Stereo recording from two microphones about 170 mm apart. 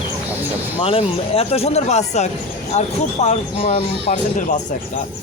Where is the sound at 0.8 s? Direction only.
35° left (ahead or behind).